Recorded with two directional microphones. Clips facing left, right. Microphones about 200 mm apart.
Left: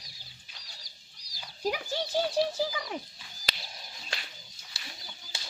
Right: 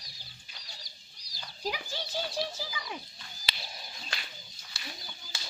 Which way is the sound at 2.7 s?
45° left (ahead or behind).